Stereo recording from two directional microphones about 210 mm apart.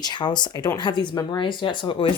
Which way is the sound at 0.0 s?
20° left (ahead or behind).